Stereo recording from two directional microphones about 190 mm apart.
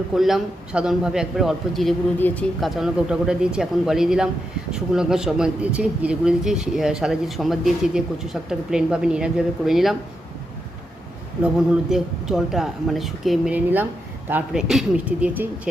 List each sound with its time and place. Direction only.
0.1 s speech: centre (ahead or behind)
2.6 s speech: centre (ahead or behind)
11.5 s speech: 5° right (ahead or behind)